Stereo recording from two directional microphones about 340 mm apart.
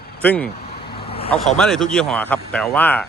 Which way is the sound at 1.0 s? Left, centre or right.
Centre.